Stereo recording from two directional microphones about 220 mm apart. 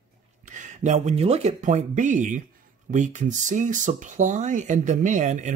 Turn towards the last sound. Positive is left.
turn(degrees=-35)  # may be behind; listen again after turning